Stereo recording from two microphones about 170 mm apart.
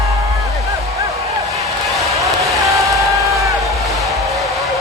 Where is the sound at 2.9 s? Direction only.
20° right (ahead or behind).